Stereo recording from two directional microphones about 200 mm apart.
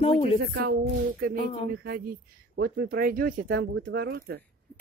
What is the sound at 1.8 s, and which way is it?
Speech, 50° right (ahead or behind).